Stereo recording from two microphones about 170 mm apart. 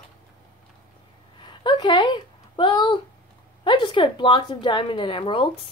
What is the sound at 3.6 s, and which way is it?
Speech, 30° left (ahead or behind).